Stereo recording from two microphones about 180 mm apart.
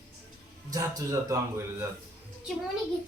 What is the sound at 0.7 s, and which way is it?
Speech, 20° right (ahead or behind).